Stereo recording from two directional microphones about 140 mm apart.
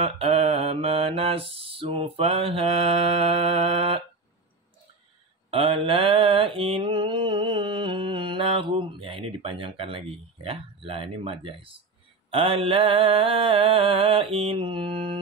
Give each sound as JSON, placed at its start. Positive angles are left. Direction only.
{"t": 0.0, "sound": "mantra", "side_deg": -45}
{"t": 5.5, "sound": "mantra", "side_deg": -40}